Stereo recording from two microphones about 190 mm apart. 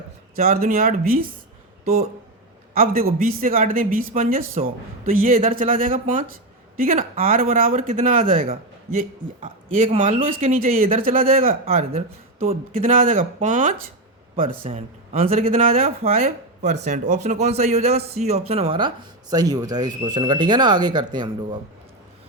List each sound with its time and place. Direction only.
0.3 s speech: 50° right (ahead or behind)
2.7 s speech: 50° right (ahead or behind); by 21.6 s 25° right (ahead or behind)